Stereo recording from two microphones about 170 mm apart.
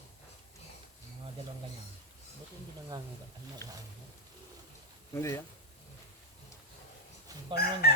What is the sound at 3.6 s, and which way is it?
Speech, 15° left (ahead or behind).